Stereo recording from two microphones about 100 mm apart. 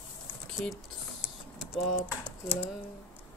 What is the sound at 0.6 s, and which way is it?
Speech, 10° left (ahead or behind).